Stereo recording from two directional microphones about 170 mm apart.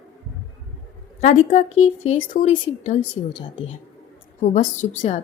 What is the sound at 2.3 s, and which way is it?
Speech, 50° left (ahead or behind).